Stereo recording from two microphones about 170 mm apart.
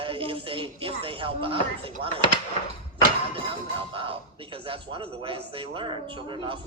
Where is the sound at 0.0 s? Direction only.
30° right (ahead or behind).